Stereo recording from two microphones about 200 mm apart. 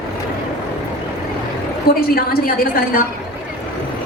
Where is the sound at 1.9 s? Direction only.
50° left (ahead or behind).